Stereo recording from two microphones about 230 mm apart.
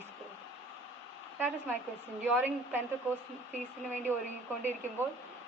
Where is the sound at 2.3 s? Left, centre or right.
Centre.